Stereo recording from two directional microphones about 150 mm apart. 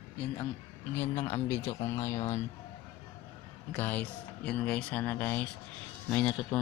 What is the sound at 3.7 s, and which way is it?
Speech, 10° left (ahead or behind).